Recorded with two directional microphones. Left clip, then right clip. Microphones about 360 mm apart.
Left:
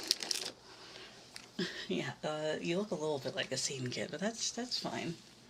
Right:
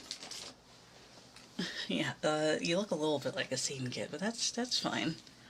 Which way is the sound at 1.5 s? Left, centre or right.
Centre.